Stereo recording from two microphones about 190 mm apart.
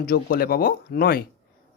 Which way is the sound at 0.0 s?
55° left (ahead or behind).